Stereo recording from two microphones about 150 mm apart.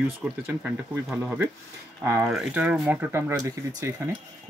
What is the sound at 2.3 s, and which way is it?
Speech, centre (ahead or behind).